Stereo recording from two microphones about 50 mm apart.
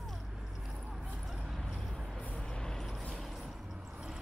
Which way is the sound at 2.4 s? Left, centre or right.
Centre.